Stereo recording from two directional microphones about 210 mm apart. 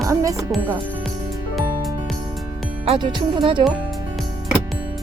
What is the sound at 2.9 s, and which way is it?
Speech, 20° right (ahead or behind).